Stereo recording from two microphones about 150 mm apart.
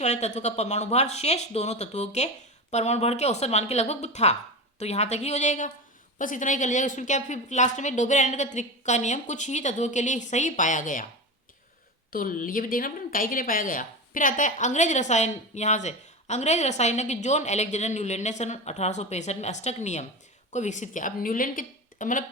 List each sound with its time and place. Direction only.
0.0 s speech: 50° left (ahead or behind)
12.1 s a woman's voice: 70° left (ahead or behind)